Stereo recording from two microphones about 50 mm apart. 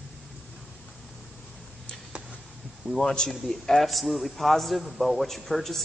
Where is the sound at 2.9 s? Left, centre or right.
Centre.